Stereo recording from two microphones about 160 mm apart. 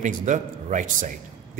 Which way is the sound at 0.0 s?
50° right (ahead or behind).